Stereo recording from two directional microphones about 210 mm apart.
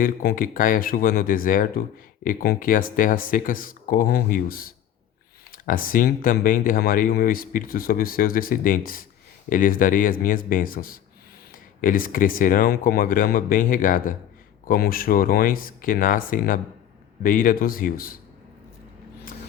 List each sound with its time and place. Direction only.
0.0 s speech: 45° left (ahead or behind)